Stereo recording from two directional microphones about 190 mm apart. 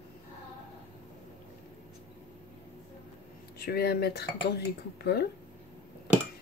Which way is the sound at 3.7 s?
55° left (ahead or behind).